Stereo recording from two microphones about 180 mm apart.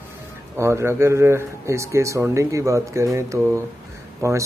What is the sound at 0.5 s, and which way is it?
Speech, 15° right (ahead or behind).